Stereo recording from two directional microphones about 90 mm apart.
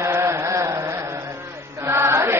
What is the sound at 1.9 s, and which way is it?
Music, 30° right (ahead or behind).